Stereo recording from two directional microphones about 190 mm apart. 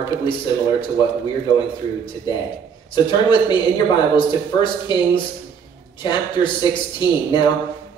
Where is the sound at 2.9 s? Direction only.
25° left (ahead or behind).